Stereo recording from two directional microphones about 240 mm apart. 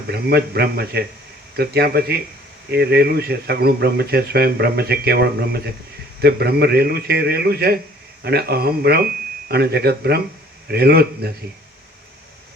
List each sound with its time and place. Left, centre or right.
0.1 s speech: right